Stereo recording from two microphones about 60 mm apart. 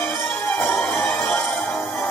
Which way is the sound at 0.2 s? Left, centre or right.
Left.